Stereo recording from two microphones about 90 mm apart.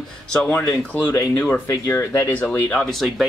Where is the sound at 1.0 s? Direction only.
20° left (ahead or behind).